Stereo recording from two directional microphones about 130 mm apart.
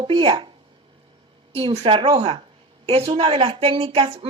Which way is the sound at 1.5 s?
50° right (ahead or behind).